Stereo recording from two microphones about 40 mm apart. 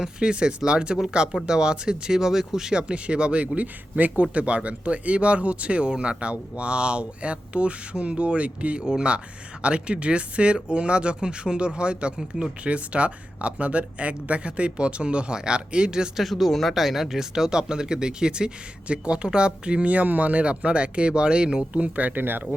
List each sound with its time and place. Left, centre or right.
0.0 s speech: right
2.8 s speech: right
8.8 s speech: right
16.1 s speech: centre; by 21.6 s right
21.7 s speech: right
22.2 s speech: right